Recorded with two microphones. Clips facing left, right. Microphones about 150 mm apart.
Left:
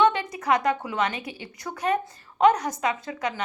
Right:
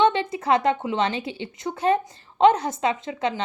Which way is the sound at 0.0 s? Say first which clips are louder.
Right 2 dB; 25° right (ahead or behind).